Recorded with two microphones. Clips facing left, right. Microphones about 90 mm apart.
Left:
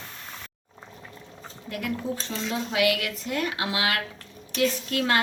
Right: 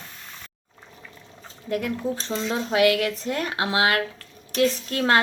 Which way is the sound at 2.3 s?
35° right (ahead or behind).